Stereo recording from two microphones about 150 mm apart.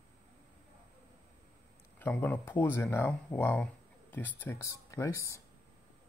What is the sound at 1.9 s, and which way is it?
Speech, 10° left (ahead or behind).